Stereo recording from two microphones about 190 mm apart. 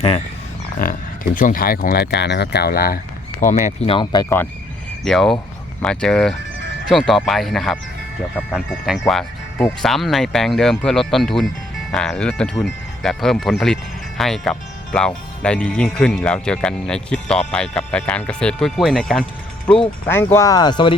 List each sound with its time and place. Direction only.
0.8 s speech: 45° left (ahead or behind)
3.4 s speech: 40° left (ahead or behind); by 4.4 s 15° left (ahead or behind)
5.0 s speech: centre (ahead or behind); by 20.9 s 25° left (ahead or behind)